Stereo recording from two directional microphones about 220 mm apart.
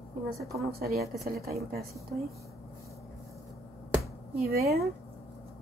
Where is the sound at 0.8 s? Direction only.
45° right (ahead or behind).